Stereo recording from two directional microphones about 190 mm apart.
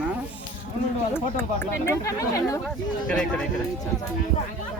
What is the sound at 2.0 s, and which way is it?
Speech, 15° left (ahead or behind).